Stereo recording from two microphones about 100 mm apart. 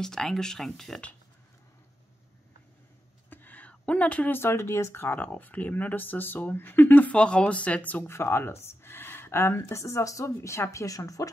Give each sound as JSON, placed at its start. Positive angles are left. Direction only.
{"t": 0.0, "sound": "speech", "side_deg": 5}
{"t": 3.3, "sound": "speech", "side_deg": 20}
{"t": 8.1, "sound": "speech", "side_deg": 25}